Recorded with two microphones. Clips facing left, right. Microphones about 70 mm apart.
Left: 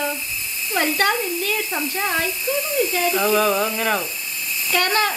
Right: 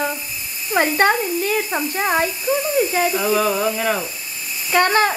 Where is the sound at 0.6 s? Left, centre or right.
Right.